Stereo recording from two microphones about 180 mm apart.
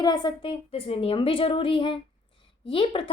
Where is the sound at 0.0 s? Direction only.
25° left (ahead or behind).